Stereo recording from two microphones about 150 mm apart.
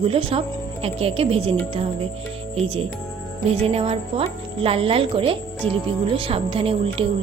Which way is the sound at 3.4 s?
40° right (ahead or behind).